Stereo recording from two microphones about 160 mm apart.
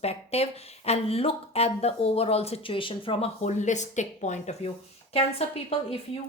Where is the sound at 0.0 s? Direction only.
40° left (ahead or behind).